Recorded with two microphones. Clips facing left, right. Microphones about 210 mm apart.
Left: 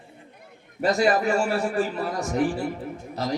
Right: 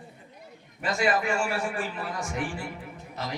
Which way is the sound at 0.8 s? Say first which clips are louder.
Left 5 dB; 40° left (ahead or behind).